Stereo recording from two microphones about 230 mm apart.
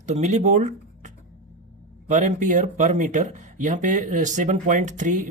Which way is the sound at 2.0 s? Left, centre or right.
Right.